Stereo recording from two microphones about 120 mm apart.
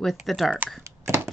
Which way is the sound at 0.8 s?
20° right (ahead or behind).